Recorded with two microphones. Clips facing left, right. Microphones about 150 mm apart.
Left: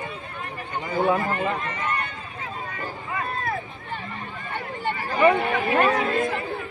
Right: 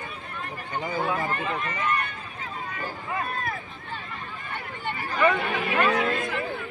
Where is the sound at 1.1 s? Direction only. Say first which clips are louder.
Left 3 dB; 20° left (ahead or behind).